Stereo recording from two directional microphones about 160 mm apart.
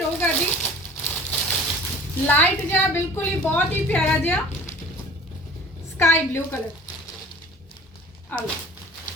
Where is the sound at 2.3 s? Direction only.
10° left (ahead or behind).